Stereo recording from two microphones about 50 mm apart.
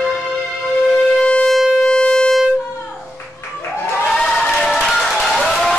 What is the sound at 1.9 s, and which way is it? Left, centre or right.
Siren, centre.